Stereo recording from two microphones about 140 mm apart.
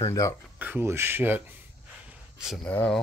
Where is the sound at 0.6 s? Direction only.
15° right (ahead or behind).